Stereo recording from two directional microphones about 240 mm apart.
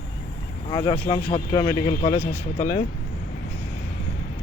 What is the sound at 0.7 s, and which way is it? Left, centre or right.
Speech, left.